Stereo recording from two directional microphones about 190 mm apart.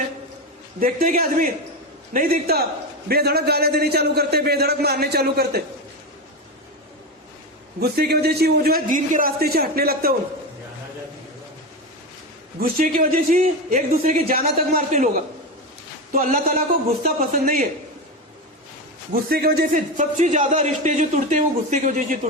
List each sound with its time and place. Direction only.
0.8 s a man's voice: 50° right (ahead or behind)
2.1 s a man's voice: 50° right (ahead or behind)
7.8 s a man's voice: 55° right (ahead or behind)
12.5 s a man's voice: 50° right (ahead or behind)
16.1 s a man's voice: 45° right (ahead or behind)
19.1 s a man's voice: 55° right (ahead or behind)